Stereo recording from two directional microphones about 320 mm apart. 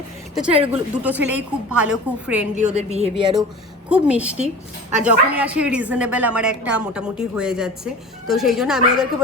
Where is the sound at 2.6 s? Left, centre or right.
Right.